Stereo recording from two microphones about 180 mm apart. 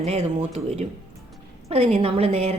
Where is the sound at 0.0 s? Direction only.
40° right (ahead or behind).